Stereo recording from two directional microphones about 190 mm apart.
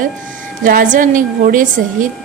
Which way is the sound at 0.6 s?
45° right (ahead or behind).